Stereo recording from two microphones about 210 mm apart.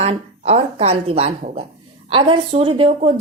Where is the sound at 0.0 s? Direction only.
30° right (ahead or behind).